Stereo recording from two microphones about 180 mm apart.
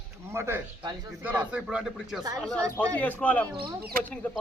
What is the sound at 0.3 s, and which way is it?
A man's voice, 15° right (ahead or behind).